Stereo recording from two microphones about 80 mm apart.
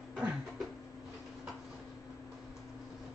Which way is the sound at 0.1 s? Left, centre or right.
Centre.